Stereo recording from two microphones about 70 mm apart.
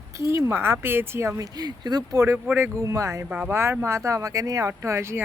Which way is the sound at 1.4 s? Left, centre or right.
Right.